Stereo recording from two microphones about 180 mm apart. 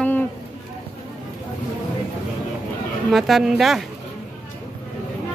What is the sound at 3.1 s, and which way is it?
Speech, centre (ahead or behind).